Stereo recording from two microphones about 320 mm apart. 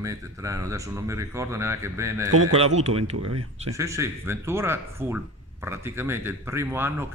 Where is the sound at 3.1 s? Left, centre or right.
Right.